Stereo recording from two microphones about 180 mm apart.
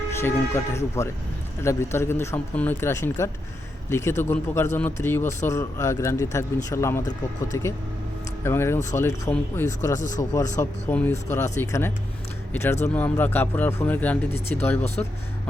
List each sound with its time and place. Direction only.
0.1 s a man's voice: 15° left (ahead or behind)